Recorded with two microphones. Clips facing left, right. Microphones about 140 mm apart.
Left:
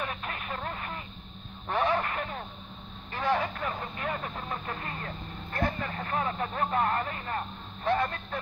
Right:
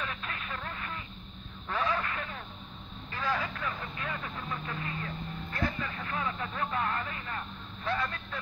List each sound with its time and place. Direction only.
0.0 s vehicle: 35° left (ahead or behind)
2.0 s a sound: 35° left (ahead or behind)
3.1 s vehicle: 30° left (ahead or behind)